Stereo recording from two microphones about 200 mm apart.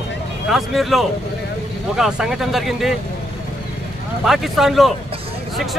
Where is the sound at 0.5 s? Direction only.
Centre (ahead or behind).